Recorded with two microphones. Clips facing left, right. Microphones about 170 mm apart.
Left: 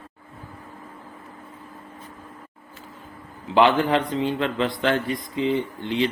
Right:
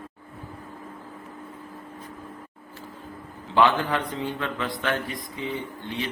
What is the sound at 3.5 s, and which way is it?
Speech, 20° left (ahead or behind).